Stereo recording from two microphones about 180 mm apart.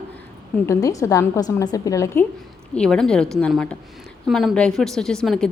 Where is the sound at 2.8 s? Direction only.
5° left (ahead or behind).